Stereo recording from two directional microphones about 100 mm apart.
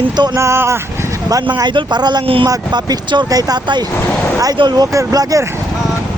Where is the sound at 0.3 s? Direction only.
25° right (ahead or behind).